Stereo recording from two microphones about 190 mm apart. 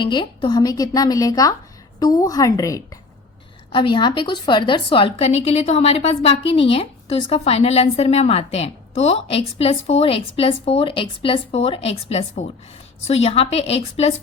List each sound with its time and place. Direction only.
0.0 s a woman's voice: 25° left (ahead or behind)